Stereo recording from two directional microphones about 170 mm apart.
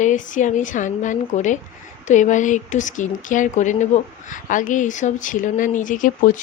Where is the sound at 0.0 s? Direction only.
45° left (ahead or behind).